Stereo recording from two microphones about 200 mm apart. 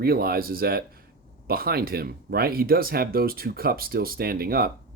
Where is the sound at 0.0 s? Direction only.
50° right (ahead or behind).